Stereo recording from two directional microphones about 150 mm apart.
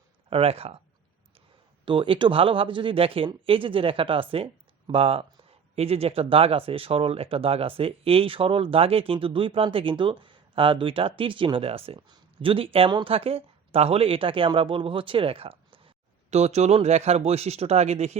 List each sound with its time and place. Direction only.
0.3 s speech: 40° right (ahead or behind)
1.8 s speech: 35° right (ahead or behind)